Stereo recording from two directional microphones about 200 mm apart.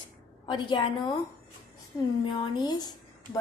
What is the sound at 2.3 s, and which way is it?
Speech, 20° left (ahead or behind).